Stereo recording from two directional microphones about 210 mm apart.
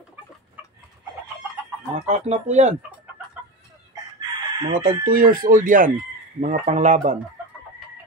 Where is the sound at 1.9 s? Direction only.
35° right (ahead or behind).